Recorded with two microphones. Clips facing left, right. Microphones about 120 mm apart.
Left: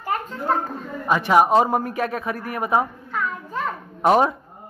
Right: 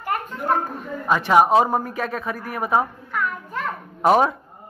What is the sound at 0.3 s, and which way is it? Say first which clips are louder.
Children playing: right 2 dB; 15° right (ahead or behind).